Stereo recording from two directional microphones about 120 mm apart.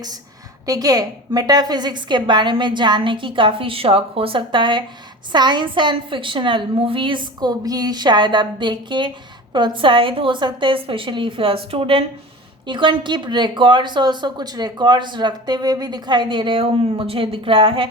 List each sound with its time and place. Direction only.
0.6 s a woman's voice: 30° right (ahead or behind); by 17.8 s 45° right (ahead or behind)